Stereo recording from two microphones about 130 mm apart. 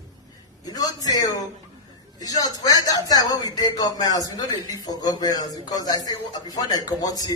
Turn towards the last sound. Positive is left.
turn(degrees=30)  # may be behind; listen again after turning